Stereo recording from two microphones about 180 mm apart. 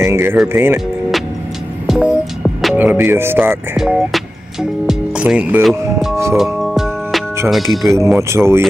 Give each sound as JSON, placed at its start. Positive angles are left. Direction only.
{"t": 0.0, "sound": "speech", "side_deg": -15}
{"t": 1.9, "sound": "speech", "side_deg": -5}
{"t": 6.3, "sound": "music", "side_deg": 0}
{"t": 7.4, "sound": "speech", "side_deg": 0}
{"t": 8.2, "sound": "speech", "side_deg": -15}